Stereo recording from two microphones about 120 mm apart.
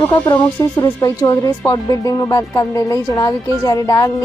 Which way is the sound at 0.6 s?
30° left (ahead or behind).